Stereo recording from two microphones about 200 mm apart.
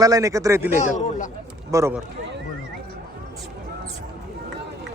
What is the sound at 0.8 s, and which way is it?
Speech, 40° left (ahead or behind).